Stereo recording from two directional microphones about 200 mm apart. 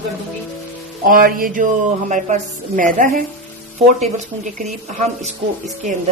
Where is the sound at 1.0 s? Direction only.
45° right (ahead or behind).